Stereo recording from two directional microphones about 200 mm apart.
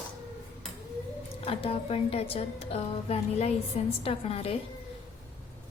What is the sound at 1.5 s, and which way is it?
A woman's voice, 30° left (ahead or behind).